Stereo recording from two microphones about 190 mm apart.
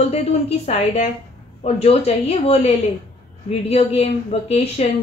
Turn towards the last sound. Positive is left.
turn(degrees=35)  # may be behind; listen again after turning